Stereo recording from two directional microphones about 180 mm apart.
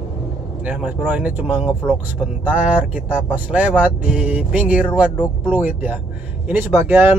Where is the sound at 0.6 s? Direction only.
10° right (ahead or behind).